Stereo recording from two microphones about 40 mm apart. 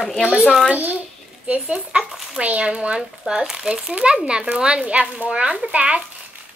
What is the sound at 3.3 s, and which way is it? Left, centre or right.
Speech, centre.